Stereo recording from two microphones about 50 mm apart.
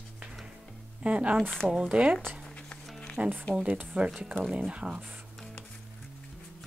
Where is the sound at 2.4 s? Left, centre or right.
Left.